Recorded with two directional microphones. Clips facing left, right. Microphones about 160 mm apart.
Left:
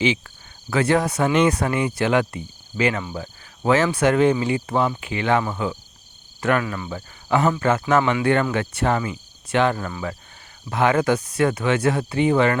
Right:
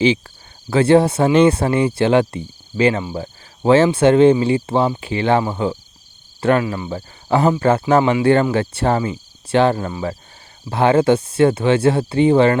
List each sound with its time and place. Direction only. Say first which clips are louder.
0.7 s speech: right 7 dB; 30° right (ahead or behind)